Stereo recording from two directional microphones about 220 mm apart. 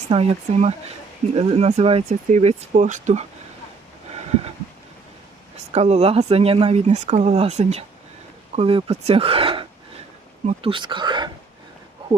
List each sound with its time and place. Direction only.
0.1 s speech: 30° right (ahead or behind)
4.1 s a sound: 30° right (ahead or behind)
5.7 s speech: 30° right (ahead or behind)